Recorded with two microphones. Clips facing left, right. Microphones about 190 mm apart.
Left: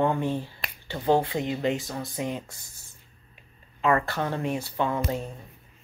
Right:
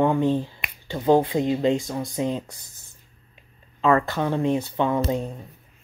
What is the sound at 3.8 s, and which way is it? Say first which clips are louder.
Speech: right 4 dB; 30° right (ahead or behind).